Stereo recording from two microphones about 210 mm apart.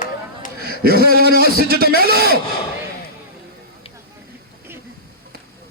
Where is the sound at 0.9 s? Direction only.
45° right (ahead or behind).